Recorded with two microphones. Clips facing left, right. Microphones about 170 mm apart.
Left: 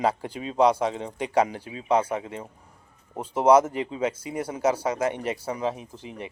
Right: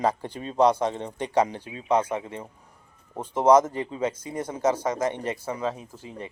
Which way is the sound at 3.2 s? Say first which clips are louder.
Even; 10° left (ahead or behind).